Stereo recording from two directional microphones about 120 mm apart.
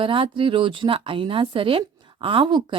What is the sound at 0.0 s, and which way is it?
Speech, 45° right (ahead or behind).